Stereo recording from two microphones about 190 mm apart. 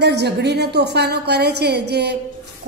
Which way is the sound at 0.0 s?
60° right (ahead or behind).